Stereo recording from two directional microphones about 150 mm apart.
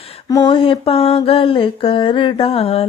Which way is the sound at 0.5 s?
40° left (ahead or behind).